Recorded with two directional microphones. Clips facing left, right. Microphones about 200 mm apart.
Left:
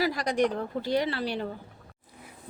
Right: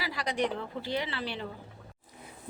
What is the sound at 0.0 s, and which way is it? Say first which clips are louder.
A woman's voice: left 6 dB; 45° left (ahead or behind).